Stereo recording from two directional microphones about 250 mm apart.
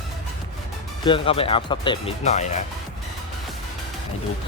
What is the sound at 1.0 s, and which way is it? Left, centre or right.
Speech, left.